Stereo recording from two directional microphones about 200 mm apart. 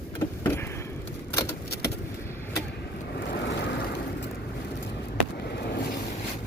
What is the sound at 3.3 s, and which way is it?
Vehicle, 60° left (ahead or behind).